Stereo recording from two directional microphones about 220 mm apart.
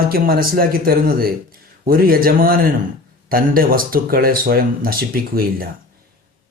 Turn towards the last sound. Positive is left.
turn(degrees=-40)  # may be behind; listen again after turning